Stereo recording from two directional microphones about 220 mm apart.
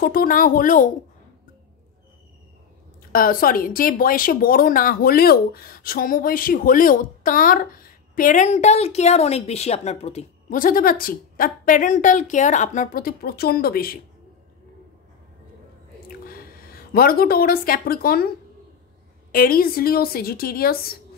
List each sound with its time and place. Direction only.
0.0 s speech: 40° left (ahead or behind)
3.1 s speech: 40° left (ahead or behind)
16.3 s speech: 40° left (ahead or behind)
19.3 s a woman's voice: 40° left (ahead or behind)